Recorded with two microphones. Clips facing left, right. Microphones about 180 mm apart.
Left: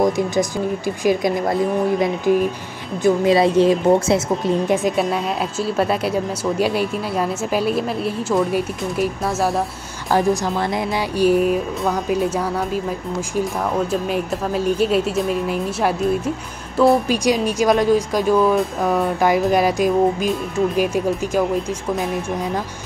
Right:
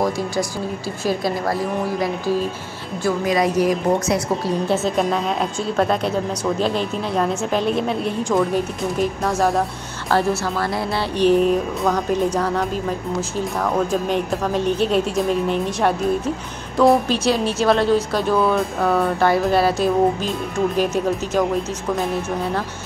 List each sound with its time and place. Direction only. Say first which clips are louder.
1.0 s a woman's voice: left 3 dB; 20° left (ahead or behind)
4.6 s a woman's voice: left 1 dB; 15° left (ahead or behind)
14.0 s speech: right 1 dB; 5° left (ahead or behind)
17.1 s a woman's voice: left 1 dB; 15° left (ahead or behind)